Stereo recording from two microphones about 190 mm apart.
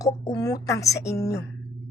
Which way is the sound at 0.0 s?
20° left (ahead or behind).